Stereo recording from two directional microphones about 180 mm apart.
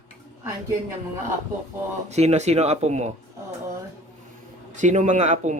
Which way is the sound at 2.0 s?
35° right (ahead or behind).